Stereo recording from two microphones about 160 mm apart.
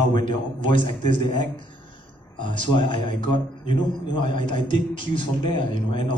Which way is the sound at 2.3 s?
30° left (ahead or behind).